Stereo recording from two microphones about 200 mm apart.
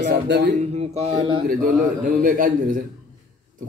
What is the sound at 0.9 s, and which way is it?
Speech, 30° right (ahead or behind).